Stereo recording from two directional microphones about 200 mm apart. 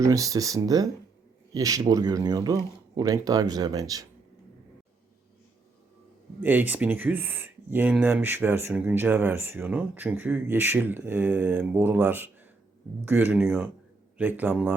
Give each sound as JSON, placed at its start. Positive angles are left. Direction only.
{"t": 0.0, "sound": "speech", "side_deg": -15}
{"t": 6.4, "sound": "speech", "side_deg": -10}